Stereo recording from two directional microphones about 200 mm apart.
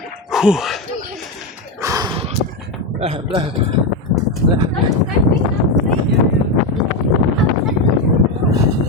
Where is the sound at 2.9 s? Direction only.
30° right (ahead or behind).